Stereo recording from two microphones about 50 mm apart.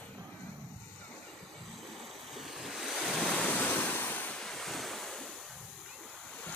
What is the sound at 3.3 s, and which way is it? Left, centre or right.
Waves, centre.